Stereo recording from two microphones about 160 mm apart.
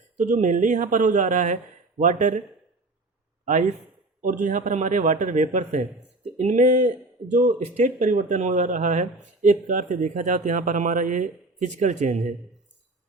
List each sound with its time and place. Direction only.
0.2 s speech: 50° right (ahead or behind)
3.4 s a man's voice: 50° right (ahead or behind)